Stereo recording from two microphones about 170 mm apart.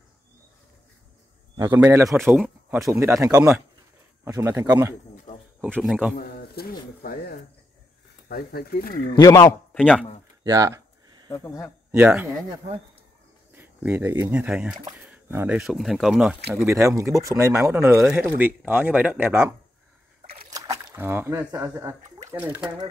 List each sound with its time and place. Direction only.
1.6 s speech: 15° right (ahead or behind)
2.8 s speech: 15° right (ahead or behind)
5.1 s a sound: 45° left (ahead or behind)
5.6 s speech: 5° right (ahead or behind)
6.1 s speech: 65° left (ahead or behind)
9.1 s a man's voice: 25° left (ahead or behind)
9.8 s speech: 5° left (ahead or behind)
10.4 s a sound: 20° right (ahead or behind)
11.2 s speech: 15° left (ahead or behind)
11.9 s speech: 5° right (ahead or behind)
13.5 s cricket: 10° right (ahead or behind)
14.2 s speech: 10° right (ahead or behind)
16.9 s speech: 20° right (ahead or behind)
20.4 s a sound: 20° right (ahead or behind)